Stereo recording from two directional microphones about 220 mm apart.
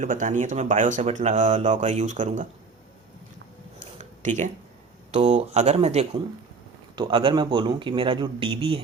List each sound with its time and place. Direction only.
0.0 s speech: 35° right (ahead or behind)
3.8 s a sound: 35° right (ahead or behind)
5.1 s speech: 30° right (ahead or behind)